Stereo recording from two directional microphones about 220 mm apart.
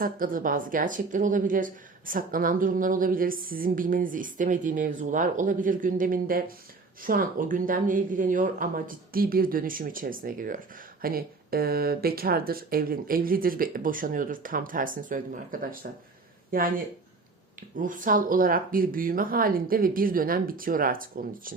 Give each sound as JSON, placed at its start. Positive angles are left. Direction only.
{"t": 0.0, "sound": "speech", "side_deg": -40}